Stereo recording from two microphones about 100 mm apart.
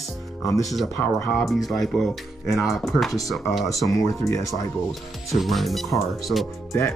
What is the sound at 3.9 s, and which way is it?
Speech, 30° left (ahead or behind).